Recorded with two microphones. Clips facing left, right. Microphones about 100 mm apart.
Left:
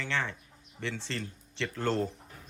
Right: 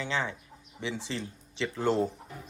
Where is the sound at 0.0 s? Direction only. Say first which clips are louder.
Right 2 dB; 15° right (ahead or behind).